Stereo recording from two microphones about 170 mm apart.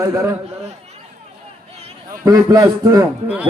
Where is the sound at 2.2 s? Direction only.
20° right (ahead or behind).